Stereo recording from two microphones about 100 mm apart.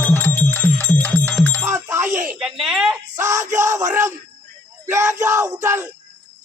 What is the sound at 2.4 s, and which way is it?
Speech, 5° right (ahead or behind).